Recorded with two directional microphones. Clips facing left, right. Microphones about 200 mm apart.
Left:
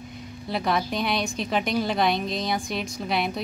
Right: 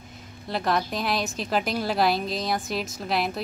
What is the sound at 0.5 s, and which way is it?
A woman's voice, centre (ahead or behind).